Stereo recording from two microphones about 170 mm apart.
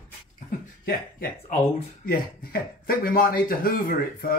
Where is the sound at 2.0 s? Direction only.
60° left (ahead or behind).